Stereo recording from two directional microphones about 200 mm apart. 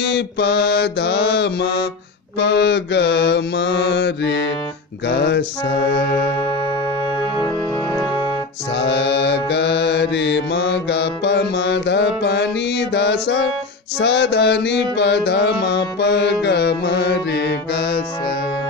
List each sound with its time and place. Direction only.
0.0 s mantra: 60° left (ahead or behind)
5.9 s music: 50° left (ahead or behind)
7.9 s organ: centre (ahead or behind)
8.7 s mantra: 60° left (ahead or behind)